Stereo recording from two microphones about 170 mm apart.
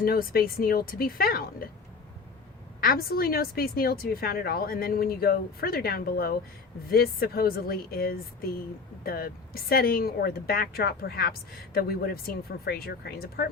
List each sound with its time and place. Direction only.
0.0 s speech: 60° left (ahead or behind)
2.8 s speech: 60° left (ahead or behind)